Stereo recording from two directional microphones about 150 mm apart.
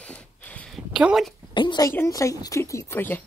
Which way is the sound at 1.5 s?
30° left (ahead or behind).